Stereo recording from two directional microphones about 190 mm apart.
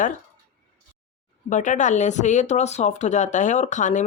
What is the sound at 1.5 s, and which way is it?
Speech, 40° left (ahead or behind).